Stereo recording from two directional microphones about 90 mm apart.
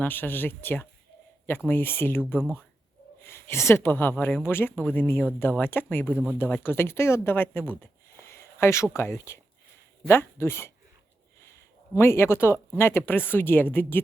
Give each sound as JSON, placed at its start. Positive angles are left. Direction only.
{"t": 0.0, "sound": "speech", "side_deg": 20}
{"t": 6.1, "sound": "speech", "side_deg": -15}
{"t": 6.6, "sound": "speech", "side_deg": 25}